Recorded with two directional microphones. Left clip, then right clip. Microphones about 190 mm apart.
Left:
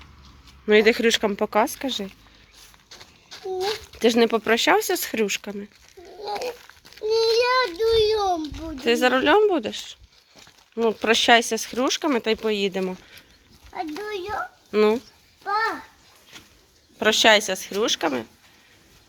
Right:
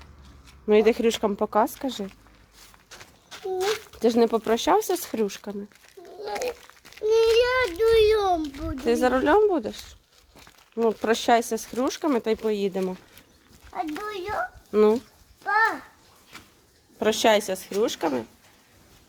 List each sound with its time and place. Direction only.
0.7 s a woman's voice: centre (ahead or behind)
3.3 s speech: 5° right (ahead or behind)
5.4 s speech: 10° left (ahead or behind)
6.9 s a sound: 5° right (ahead or behind)
7.3 s a sound: 35° right (ahead or behind)
7.6 s a woman's voice: 15° right (ahead or behind)
8.8 s a woman's voice: 5° right (ahead or behind)
17.0 s a woman's voice: 10° right (ahead or behind)